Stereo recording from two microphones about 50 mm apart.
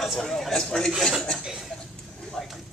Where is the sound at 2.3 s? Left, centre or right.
Centre.